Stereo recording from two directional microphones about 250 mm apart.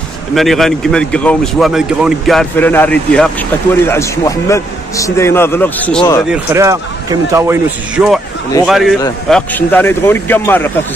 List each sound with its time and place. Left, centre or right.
0.3 s speech: centre
6.3 s a man's voice: centre